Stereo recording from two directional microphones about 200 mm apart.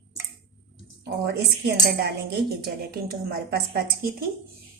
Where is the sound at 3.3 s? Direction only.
50° right (ahead or behind).